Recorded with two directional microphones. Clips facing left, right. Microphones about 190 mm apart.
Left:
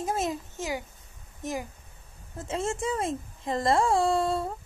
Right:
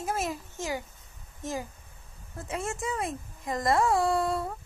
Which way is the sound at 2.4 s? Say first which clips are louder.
Left 3 dB; 30° left (ahead or behind).